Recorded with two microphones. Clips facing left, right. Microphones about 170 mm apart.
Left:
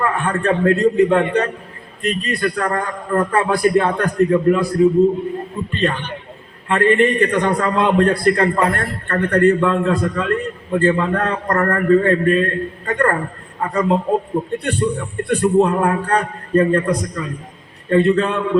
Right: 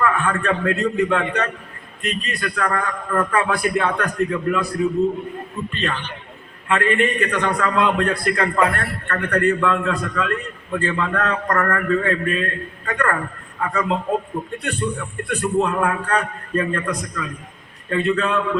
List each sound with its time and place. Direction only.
0.0 s a man's voice: 30° left (ahead or behind)